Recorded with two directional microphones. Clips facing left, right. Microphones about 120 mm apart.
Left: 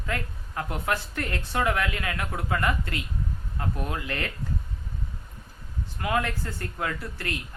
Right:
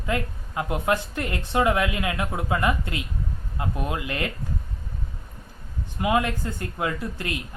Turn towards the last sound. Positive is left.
turn(degrees=-15)  # may be behind; listen again after turning